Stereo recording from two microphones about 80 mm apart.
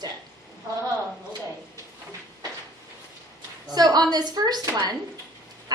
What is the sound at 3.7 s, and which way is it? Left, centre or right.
Speech, right.